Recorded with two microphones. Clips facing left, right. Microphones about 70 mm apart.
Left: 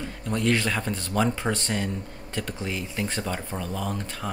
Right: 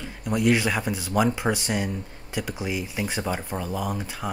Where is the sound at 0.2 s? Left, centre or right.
Centre.